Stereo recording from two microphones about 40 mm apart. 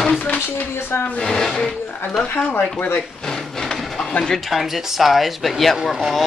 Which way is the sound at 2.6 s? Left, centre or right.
Left.